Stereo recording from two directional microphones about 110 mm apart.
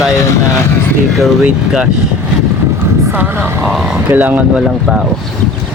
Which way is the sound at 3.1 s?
15° right (ahead or behind).